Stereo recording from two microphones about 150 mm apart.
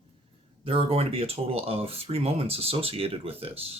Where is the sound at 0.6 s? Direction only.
40° right (ahead or behind).